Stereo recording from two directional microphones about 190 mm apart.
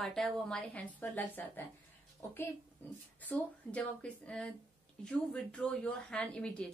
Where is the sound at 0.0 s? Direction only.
Centre (ahead or behind).